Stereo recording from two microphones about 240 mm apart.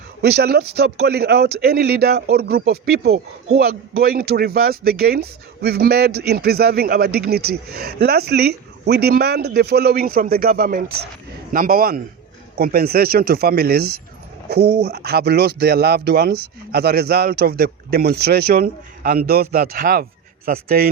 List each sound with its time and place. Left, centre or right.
0.2 s speech: right